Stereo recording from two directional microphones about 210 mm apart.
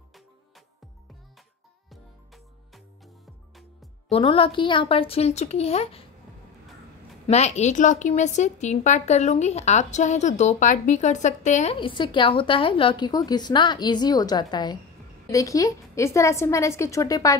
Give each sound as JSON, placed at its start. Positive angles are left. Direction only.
{"t": 1.9, "sound": "music", "side_deg": 0}
{"t": 4.1, "sound": "a woman's voice", "side_deg": 25}
{"t": 7.2, "sound": "a woman's voice", "side_deg": 30}